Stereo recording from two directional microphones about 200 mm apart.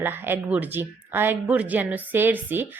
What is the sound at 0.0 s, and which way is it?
Speech, 10° right (ahead or behind).